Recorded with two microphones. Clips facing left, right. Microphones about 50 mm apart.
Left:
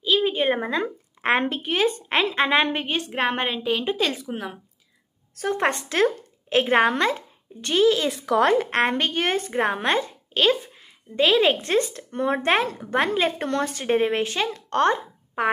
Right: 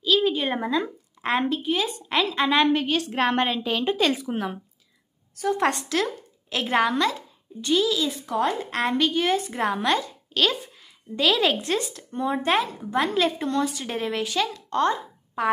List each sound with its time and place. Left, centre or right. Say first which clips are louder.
0.0 s a woman's voice: left 1 dB; left; by 4.6 s centre
5.3 s a woman's voice: right 1 dB; left
5.6 s speech: left 5 dB; left
8.3 s speech: left 7 dB; left
8.6 s a woman's voice: left 1 dB; left
12.1 s a woman's voice: even; left
14.7 s a sound: left 5 dB; left